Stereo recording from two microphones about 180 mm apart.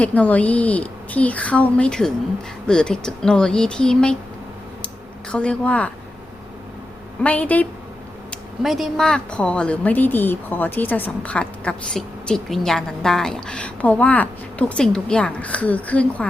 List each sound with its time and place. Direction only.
0.0 s speech: 10° left (ahead or behind)
5.3 s speech: 5° left (ahead or behind)
7.2 s speech: 10° left (ahead or behind)